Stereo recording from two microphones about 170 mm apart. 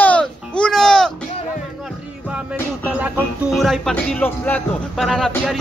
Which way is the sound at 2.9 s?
5° right (ahead or behind).